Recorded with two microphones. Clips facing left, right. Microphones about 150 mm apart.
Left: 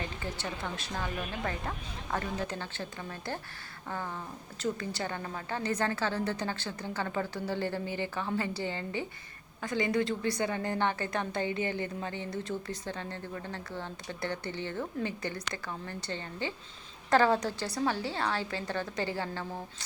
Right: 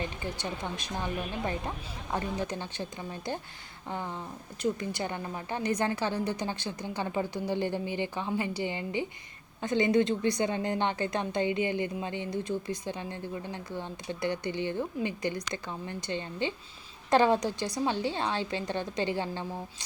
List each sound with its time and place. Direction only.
0.2 s a woman's voice: 15° right (ahead or behind)